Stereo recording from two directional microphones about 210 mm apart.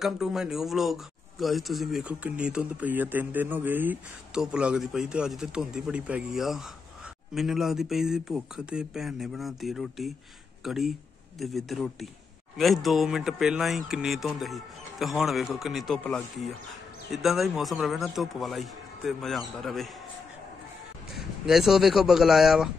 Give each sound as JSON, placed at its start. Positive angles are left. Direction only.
{"t": 0.0, "sound": "speech", "side_deg": 0}
{"t": 21.1, "sound": "speech", "side_deg": 0}